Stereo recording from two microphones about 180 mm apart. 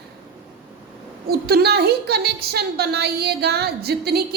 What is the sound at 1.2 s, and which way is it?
A woman's voice, 60° right (ahead or behind).